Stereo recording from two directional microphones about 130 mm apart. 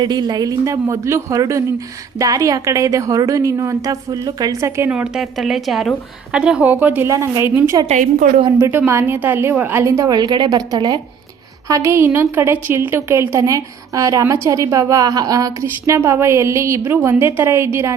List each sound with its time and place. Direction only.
0.0 s a woman's voice: 30° right (ahead or behind)
4.9 s a woman's voice: 5° right (ahead or behind)
7.9 s a woman's voice: 80° right
8.4 s speech: 30° right (ahead or behind)
8.9 s a woman's voice: 20° right (ahead or behind)
11.7 s a woman's voice: 20° right (ahead or behind)